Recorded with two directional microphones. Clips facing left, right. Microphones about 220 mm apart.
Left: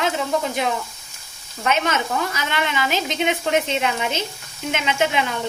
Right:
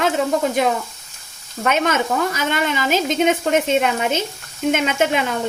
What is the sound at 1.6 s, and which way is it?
Speech, 50° right (ahead or behind).